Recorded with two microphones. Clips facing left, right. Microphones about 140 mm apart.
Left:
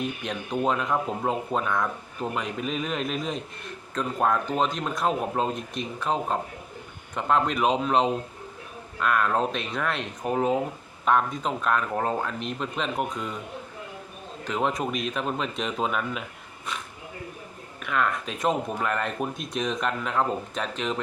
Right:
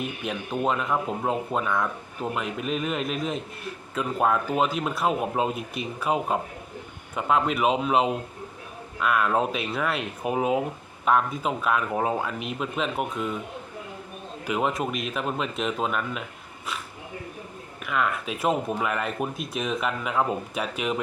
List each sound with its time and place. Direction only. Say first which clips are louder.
0.0 s speech: even; 5° right (ahead or behind)
14.4 s speech: right 1 dB; 5° right (ahead or behind)
17.8 s speech: even; 5° right (ahead or behind)